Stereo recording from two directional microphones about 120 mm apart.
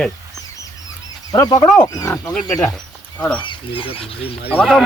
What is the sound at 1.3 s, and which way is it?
Speech, 30° left (ahead or behind).